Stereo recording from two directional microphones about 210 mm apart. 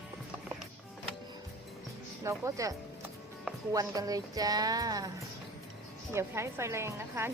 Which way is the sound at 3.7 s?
15° right (ahead or behind).